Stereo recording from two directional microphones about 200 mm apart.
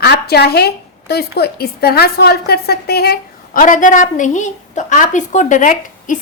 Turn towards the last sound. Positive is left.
turn(degrees=40)  # may be behind; listen again after turning